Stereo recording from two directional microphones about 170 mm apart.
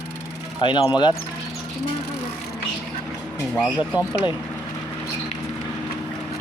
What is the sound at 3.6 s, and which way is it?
Speech, 5° right (ahead or behind).